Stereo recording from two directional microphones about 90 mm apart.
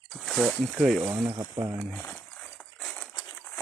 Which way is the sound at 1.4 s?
45° right (ahead or behind).